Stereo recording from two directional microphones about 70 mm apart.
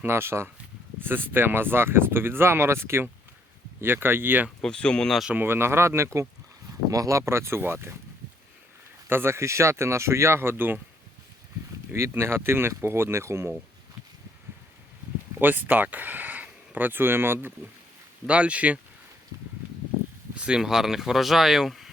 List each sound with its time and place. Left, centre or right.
0.0 s speech: right
4.6 s speech: centre
5.4 s speech: right
6.9 s speech: right
9.0 s speech: right
11.9 s speech: right
15.4 s speech: right
18.3 s speech: centre
20.3 s a sound: centre
20.6 s speech: centre